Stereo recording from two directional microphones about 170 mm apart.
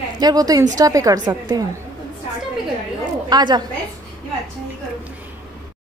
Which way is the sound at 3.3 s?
25° right (ahead or behind).